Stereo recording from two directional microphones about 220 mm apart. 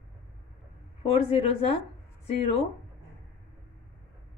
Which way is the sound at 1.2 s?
25° left (ahead or behind).